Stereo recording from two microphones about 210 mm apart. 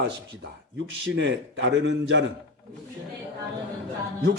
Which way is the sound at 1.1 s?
60° right (ahead or behind).